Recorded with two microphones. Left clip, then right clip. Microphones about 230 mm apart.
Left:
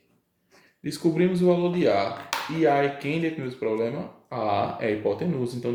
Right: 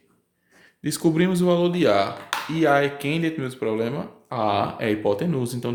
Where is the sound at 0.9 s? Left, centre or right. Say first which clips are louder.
Right 2 dB; right.